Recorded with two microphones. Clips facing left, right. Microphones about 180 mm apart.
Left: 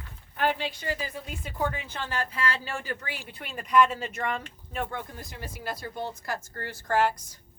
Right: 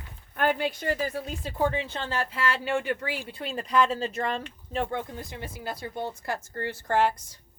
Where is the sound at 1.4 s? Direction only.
30° right (ahead or behind).